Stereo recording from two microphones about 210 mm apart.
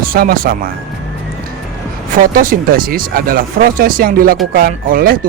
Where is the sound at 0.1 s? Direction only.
45° right (ahead or behind).